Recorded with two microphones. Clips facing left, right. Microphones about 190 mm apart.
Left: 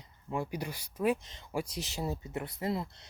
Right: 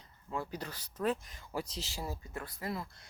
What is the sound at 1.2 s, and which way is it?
Speech, 25° left (ahead or behind).